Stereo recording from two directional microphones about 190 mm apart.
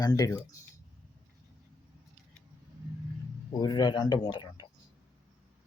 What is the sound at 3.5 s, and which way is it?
Speech, 20° left (ahead or behind).